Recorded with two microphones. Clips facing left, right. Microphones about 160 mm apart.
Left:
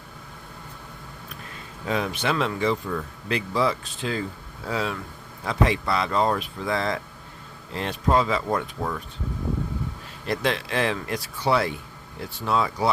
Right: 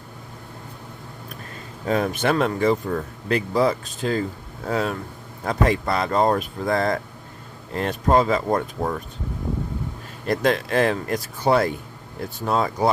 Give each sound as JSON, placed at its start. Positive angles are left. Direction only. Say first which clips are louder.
{"t": 1.8, "sound": "speech", "louder": "right 5 dB", "side_deg": -45}
{"t": 10.2, "sound": "speech", "louder": "right 5 dB", "side_deg": -45}